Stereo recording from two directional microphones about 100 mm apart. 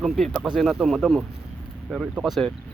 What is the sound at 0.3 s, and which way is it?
Speech, 5° right (ahead or behind).